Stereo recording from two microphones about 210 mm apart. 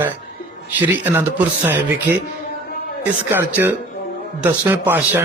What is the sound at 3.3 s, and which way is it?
A man's voice, 10° right (ahead or behind).